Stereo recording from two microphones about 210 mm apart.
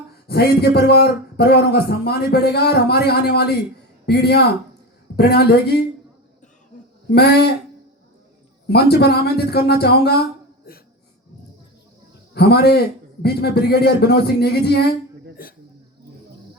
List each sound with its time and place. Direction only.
0.3 s a man's voice: 50° left (ahead or behind)
7.1 s a man's voice: 50° left (ahead or behind)
8.6 s a man's voice: 50° left (ahead or behind)
12.3 s a man's voice: 50° left (ahead or behind)